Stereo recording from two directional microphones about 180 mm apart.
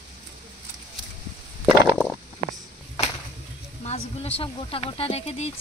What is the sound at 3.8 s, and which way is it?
Speech, 35° left (ahead or behind).